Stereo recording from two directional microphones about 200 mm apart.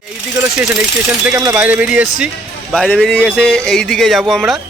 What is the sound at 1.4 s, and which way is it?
Speech, 10° right (ahead or behind).